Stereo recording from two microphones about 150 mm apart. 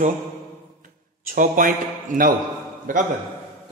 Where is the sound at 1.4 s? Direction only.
65° right (ahead or behind).